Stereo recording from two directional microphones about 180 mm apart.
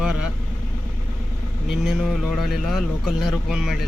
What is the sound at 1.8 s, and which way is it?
Speech, centre (ahead or behind).